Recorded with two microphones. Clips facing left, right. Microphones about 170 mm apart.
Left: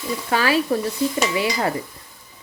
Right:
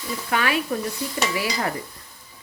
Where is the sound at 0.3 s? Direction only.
30° left (ahead or behind).